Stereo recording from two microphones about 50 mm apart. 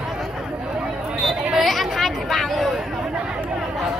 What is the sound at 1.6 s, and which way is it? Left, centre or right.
Chatter, centre.